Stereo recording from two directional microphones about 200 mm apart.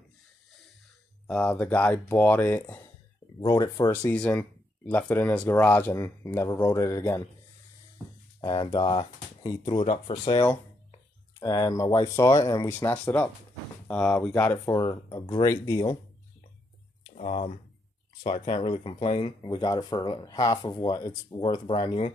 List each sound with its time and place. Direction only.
1.2 s speech: 10° left (ahead or behind)
3.3 s speech: 20° left (ahead or behind)
8.4 s speech: 20° left (ahead or behind)
17.1 s speech: 35° left (ahead or behind)